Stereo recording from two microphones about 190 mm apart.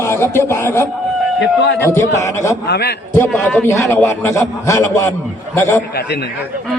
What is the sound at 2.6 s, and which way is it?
Speech, 60° left (ahead or behind).